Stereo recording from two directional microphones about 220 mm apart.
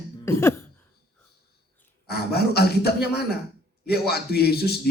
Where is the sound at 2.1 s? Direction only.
45° left (ahead or behind).